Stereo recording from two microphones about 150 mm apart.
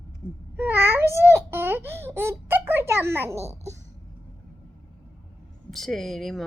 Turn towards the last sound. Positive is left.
turn(degrees=0)  # may be behind; listen again after turning